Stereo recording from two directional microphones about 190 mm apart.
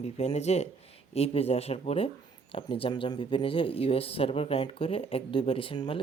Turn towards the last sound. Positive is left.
turn(degrees=25)  # may be behind; listen again after turning